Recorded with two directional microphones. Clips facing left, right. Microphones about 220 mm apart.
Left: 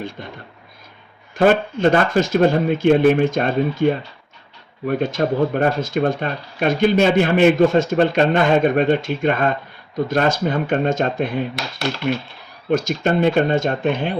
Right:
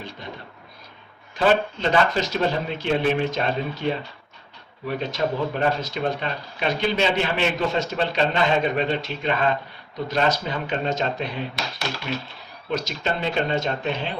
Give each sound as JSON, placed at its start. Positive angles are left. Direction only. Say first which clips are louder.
{"t": 0.2, "sound": "a sound", "louder": "left 3 dB", "side_deg": 55}
{"t": 1.4, "sound": "speech", "louder": "left 5 dB", "side_deg": 50}
{"t": 12.7, "sound": "speech", "louder": "left 8 dB", "side_deg": 50}